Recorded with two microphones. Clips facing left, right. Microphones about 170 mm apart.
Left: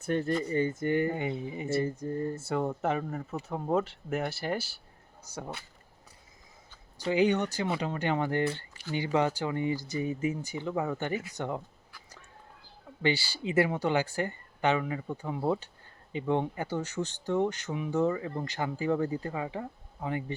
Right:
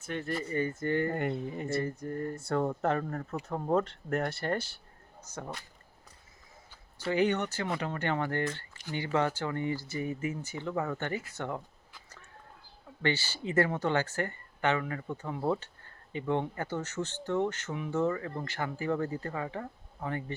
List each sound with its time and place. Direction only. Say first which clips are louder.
0.1 s speech: left 6 dB; 35° left (ahead or behind)
0.8 s speech: left 2 dB; 15° left (ahead or behind)
1.1 s speech: right 1 dB; centre (ahead or behind)
1.8 s speech: left 3 dB; 20° left (ahead or behind)
2.4 s speech: even; 5° left (ahead or behind)
7.0 s speech: left 2 dB; 15° left (ahead or behind)
13.0 s speech: left 2 dB; 15° left (ahead or behind)